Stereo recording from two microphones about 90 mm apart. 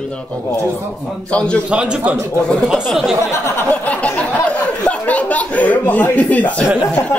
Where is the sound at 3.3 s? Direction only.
30° left (ahead or behind).